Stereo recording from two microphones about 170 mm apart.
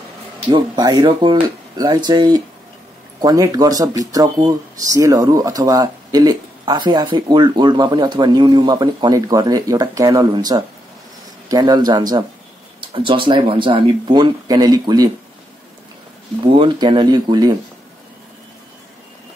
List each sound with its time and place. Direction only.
0.5 s speech: 25° right (ahead or behind)
16.4 s speech: 30° right (ahead or behind)